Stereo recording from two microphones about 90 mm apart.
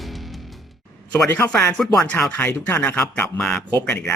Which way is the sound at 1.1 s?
20° left (ahead or behind).